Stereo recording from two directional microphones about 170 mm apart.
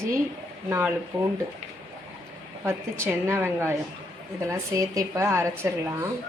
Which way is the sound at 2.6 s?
15° right (ahead or behind).